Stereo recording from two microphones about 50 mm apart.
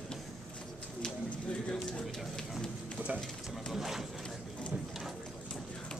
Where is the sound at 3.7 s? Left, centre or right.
Centre.